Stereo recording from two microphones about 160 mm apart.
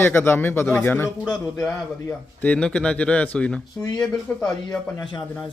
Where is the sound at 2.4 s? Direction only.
5° left (ahead or behind).